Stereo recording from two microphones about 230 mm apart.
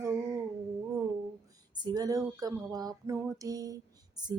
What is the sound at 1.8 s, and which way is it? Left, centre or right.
Music, centre.